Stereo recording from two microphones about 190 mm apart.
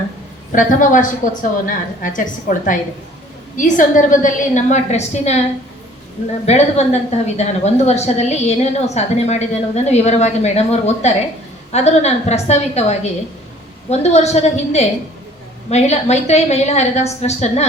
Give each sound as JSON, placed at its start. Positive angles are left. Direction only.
{"t": 0.5, "sound": "a woman's voice", "side_deg": 45}
{"t": 6.4, "sound": "a woman's voice", "side_deg": 35}